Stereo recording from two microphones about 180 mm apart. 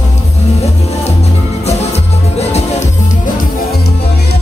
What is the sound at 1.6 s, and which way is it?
Music, 35° left (ahead or behind).